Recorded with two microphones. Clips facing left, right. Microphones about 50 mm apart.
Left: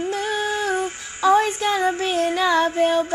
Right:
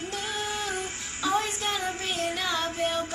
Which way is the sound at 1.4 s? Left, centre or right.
Left.